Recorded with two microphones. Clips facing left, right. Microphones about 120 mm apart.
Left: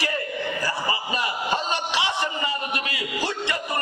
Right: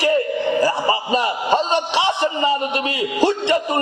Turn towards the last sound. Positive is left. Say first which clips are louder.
# right 9 dB
turn(degrees=-20)  # may be behind; listen again after turning